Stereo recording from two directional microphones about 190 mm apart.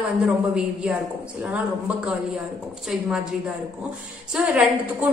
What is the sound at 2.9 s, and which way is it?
A woman's voice, 5° right (ahead or behind).